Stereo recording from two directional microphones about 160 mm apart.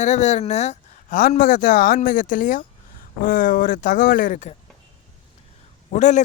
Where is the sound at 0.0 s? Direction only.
45° left (ahead or behind).